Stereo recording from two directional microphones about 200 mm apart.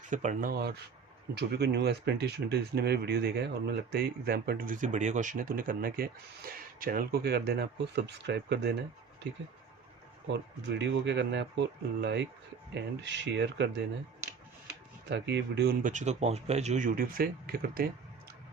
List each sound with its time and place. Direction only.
0.1 s speech: 40° right (ahead or behind)
1.4 s speech: 60° right (ahead or behind)
10.3 s speech: 60° right (ahead or behind)
15.1 s speech: 60° right (ahead or behind)
15.8 s speech: 40° right (ahead or behind)